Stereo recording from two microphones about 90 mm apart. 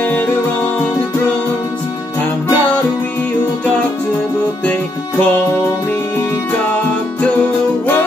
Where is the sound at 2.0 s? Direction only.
30° left (ahead or behind).